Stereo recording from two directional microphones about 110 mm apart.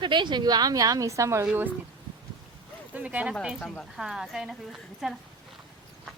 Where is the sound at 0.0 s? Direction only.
45° right (ahead or behind); by 1.5 s 30° right (ahead or behind).